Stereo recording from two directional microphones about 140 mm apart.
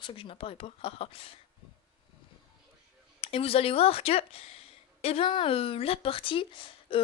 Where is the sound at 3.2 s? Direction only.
45° left (ahead or behind).